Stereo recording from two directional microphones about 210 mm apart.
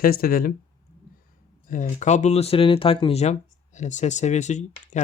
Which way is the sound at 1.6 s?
40° left (ahead or behind).